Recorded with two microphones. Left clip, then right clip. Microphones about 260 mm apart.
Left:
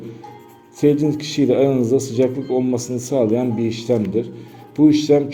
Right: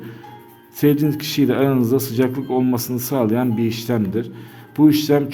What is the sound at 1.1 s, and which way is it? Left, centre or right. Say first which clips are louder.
Speech: left 1 dB; right.